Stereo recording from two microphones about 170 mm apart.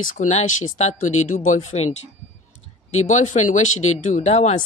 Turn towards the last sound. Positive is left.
turn(degrees=40)  # may be behind; listen again after turning